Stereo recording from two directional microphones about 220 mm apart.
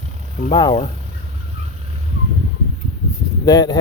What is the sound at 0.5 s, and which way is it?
Speech, 20° left (ahead or behind).